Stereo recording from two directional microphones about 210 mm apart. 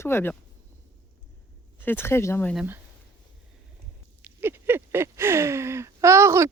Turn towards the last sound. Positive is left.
turn(degrees=-15)  # may be behind; listen again after turning